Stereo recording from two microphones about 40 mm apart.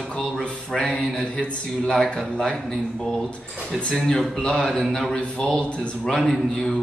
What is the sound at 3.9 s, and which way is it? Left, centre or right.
Speech, centre.